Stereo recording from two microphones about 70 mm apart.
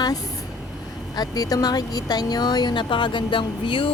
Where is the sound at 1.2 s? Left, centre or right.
Left.